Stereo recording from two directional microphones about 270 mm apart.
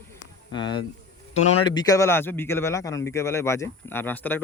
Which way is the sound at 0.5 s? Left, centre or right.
Centre.